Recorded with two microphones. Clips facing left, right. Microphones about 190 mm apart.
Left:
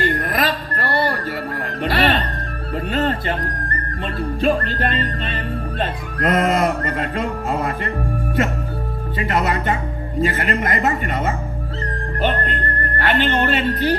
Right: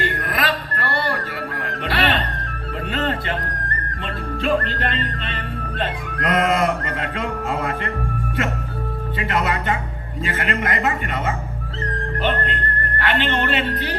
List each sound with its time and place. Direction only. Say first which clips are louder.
0.0 s music: left 3 dB; 40° left (ahead or behind)
9.1 s music: left 2 dB; 40° left (ahead or behind)